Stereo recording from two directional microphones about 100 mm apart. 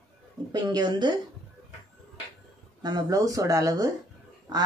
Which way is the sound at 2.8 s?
40° right (ahead or behind).